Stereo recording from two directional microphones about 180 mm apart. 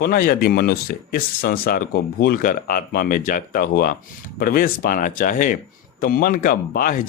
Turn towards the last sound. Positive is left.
turn(degrees=50)  # may be behind; listen again after turning